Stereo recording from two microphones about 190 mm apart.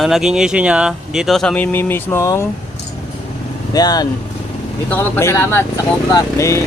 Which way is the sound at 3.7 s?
20° left (ahead or behind).